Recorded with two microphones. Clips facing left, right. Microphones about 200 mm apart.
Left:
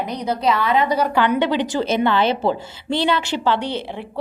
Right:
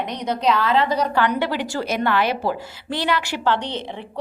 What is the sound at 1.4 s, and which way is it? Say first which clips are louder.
A woman's voice: left 4 dB; 20° left (ahead or behind).